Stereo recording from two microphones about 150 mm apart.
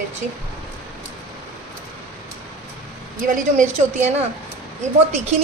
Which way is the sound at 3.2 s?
60° right (ahead or behind).